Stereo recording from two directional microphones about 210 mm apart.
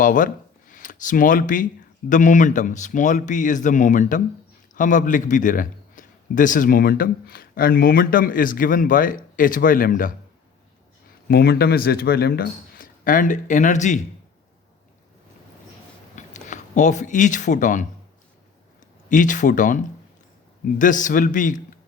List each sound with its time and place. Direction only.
0.0 s a man's voice: 40° left (ahead or behind)
11.3 s speech: 50° left (ahead or behind)
16.1 s speech: 35° left (ahead or behind)
19.0 s a man's voice: 35° left (ahead or behind)